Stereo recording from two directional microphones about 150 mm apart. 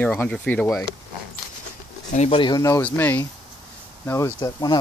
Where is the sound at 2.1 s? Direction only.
50° left (ahead or behind).